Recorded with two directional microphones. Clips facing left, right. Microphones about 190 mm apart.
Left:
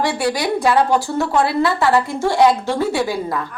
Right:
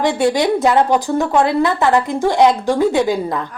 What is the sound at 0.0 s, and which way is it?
A woman's voice, 20° right (ahead or behind).